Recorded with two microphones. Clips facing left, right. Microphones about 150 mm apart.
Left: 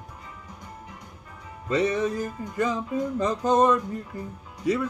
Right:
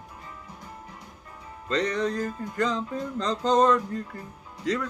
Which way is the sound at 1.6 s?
10° left (ahead or behind).